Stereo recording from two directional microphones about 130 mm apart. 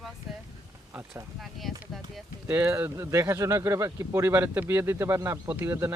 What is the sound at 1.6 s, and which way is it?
Speech, centre (ahead or behind).